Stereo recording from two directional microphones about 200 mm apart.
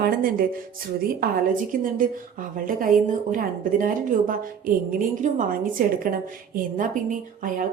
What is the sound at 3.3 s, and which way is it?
A woman's voice, 40° right (ahead or behind).